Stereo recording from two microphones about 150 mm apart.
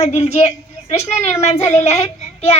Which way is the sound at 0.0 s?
45° left (ahead or behind).